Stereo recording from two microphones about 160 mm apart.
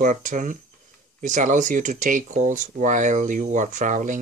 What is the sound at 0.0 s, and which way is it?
Speech, 55° right (ahead or behind).